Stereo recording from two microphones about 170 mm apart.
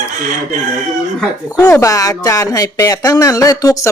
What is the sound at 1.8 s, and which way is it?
Speech, 20° left (ahead or behind).